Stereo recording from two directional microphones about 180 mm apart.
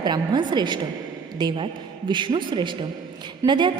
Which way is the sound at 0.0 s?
25° right (ahead or behind).